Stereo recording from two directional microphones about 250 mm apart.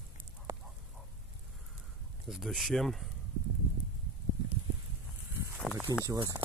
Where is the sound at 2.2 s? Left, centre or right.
Centre.